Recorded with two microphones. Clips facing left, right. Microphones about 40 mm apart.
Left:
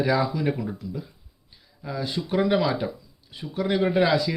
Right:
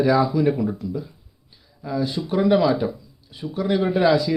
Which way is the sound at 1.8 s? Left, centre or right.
Centre.